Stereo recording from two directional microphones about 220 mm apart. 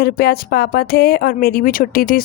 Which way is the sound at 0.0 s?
45° left (ahead or behind).